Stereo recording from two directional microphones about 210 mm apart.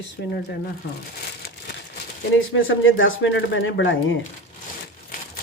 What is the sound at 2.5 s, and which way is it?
Speech, 65° left (ahead or behind).